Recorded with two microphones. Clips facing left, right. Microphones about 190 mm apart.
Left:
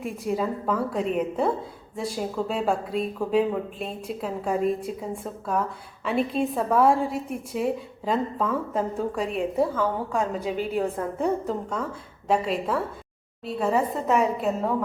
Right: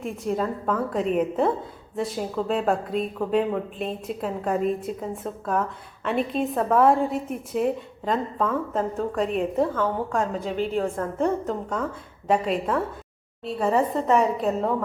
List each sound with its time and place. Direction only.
0.0 s a woman's voice: 5° left (ahead or behind)
11.4 s a woman's voice: centre (ahead or behind)